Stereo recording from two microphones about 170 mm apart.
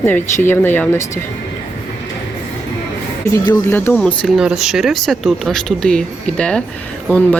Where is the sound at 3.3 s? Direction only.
15° left (ahead or behind).